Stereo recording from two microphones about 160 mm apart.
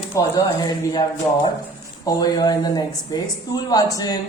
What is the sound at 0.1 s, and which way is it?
Speech, 20° left (ahead or behind).